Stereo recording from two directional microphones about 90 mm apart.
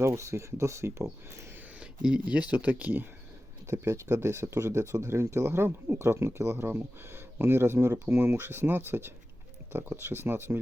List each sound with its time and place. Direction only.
0.0 s speech: 30° right (ahead or behind)
1.8 s speech: 10° right (ahead or behind)
3.7 s speech: 30° right (ahead or behind)